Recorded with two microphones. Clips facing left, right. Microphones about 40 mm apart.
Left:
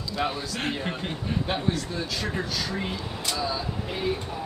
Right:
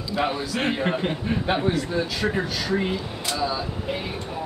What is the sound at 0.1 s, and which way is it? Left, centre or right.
A man's voice, centre.